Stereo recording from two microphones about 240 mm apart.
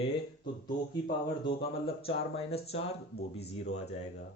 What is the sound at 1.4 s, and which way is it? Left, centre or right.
Speech, left.